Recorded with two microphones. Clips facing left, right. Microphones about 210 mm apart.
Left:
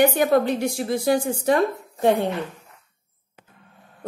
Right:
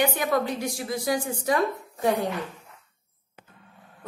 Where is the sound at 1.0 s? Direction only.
30° left (ahead or behind).